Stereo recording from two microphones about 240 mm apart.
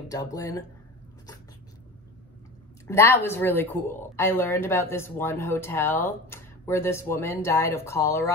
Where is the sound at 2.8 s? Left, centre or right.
Centre.